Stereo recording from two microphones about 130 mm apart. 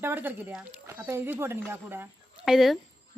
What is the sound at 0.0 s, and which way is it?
A woman's voice, 15° right (ahead or behind).